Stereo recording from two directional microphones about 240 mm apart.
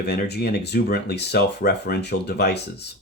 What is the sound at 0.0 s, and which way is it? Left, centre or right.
Speech, left.